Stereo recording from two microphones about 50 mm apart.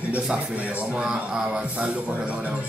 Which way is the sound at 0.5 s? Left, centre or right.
Right.